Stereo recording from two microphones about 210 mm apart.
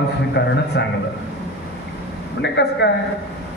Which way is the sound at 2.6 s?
55° left (ahead or behind).